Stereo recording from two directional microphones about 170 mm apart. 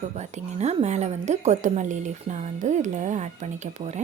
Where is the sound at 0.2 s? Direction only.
40° right (ahead or behind).